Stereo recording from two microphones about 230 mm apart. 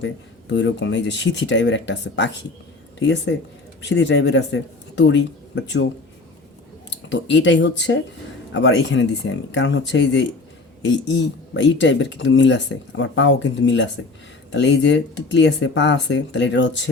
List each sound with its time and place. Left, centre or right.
0.0 s speech: left
7.1 s speech: left